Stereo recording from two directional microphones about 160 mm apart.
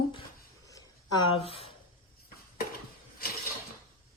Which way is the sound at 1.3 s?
35° left (ahead or behind).